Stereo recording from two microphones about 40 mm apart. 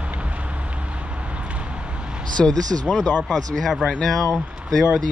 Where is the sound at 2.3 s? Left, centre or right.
Centre.